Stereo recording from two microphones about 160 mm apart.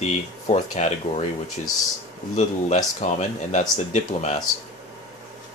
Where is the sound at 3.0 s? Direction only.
50° left (ahead or behind).